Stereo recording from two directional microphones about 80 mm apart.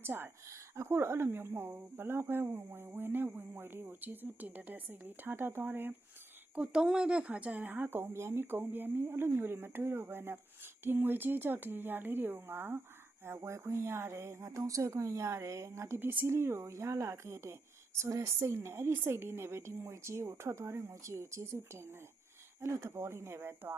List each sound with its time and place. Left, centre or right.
0.0 s speech: right
6.6 s speech: centre; by 16.0 s right
16.0 s speech: right